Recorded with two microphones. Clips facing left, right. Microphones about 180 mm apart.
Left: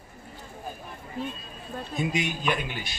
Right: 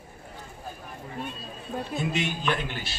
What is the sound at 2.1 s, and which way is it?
Speech, 10° left (ahead or behind).